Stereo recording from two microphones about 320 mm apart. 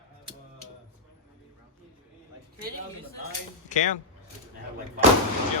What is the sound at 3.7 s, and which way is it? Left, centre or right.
Speech, left.